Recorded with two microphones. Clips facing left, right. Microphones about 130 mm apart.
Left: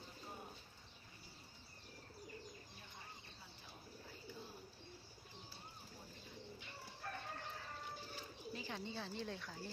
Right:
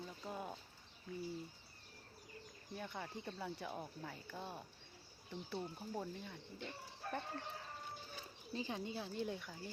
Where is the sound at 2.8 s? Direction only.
90° right.